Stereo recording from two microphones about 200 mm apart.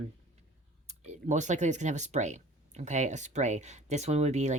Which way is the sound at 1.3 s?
35° right (ahead or behind).